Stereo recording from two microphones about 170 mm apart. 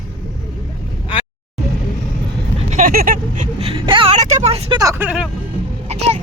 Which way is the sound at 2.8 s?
55° right (ahead or behind).